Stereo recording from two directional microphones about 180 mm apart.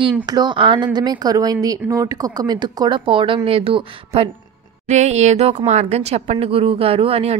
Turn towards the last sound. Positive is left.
turn(degrees=-35)  # may be behind; listen again after turning